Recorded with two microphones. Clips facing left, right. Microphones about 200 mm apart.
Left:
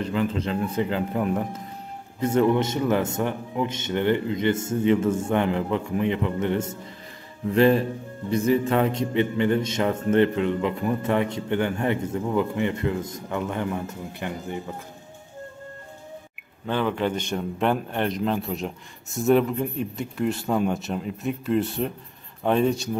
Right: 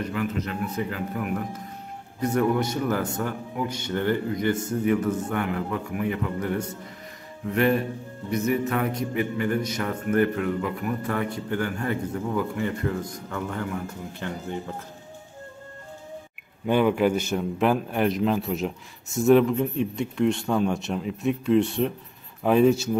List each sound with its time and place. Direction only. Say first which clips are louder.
0.0 s a man's voice: left 3 dB; 30° left (ahead or behind)
16.6 s a man's voice: right 4 dB; 10° right (ahead or behind)